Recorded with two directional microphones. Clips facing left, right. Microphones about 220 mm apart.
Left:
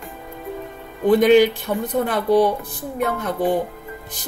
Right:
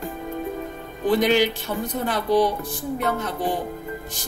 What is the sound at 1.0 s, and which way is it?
A woman's voice, 55° left (ahead or behind).